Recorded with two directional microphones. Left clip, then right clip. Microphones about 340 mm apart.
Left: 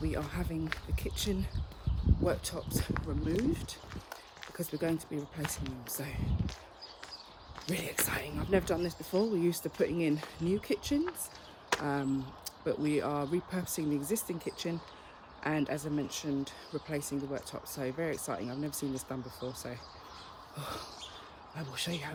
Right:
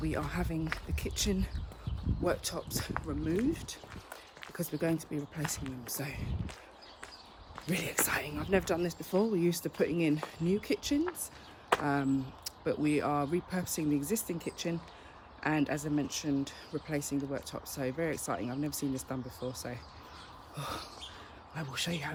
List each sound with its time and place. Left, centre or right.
0.0 s speech: centre
7.7 s speech: centre
20.6 s speech: centre